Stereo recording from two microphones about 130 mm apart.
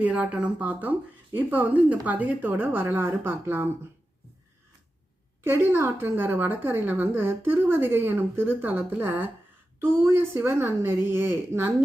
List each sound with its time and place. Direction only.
0.0 s a woman's voice: 10° right (ahead or behind)
5.4 s a woman's voice: 20° right (ahead or behind)